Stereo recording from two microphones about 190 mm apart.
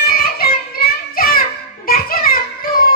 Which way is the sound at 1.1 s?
50° left (ahead or behind).